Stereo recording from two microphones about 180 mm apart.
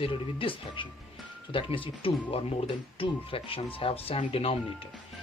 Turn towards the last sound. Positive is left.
turn(degrees=35)  # may be behind; listen again after turning